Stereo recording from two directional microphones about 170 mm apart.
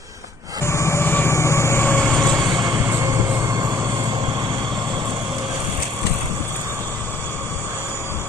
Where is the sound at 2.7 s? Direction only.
15° right (ahead or behind).